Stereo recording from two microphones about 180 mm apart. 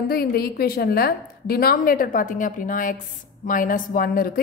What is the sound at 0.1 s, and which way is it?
A woman's voice, 60° left (ahead or behind).